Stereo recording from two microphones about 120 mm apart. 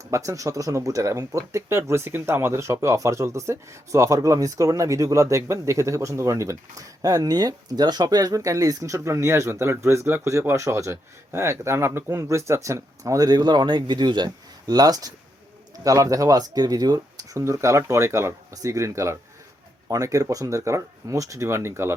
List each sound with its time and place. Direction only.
0.0 s speech: 25° right (ahead or behind)